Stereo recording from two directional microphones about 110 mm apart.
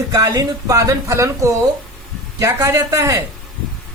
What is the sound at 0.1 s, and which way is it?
Speech, 30° right (ahead or behind).